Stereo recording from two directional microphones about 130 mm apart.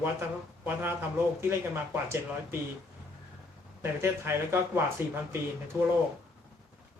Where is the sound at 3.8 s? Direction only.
20° right (ahead or behind).